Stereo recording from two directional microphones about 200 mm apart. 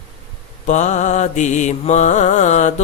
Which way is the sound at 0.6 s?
35° left (ahead or behind).